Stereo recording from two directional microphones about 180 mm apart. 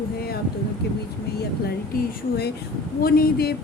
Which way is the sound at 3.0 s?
55° left (ahead or behind).